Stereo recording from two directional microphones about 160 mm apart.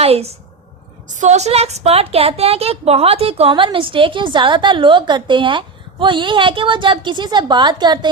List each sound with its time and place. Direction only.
0.0 s a woman's voice: 40° right (ahead or behind)
1.0 s a woman's voice: 50° right (ahead or behind); by 7.9 s 25° right (ahead or behind)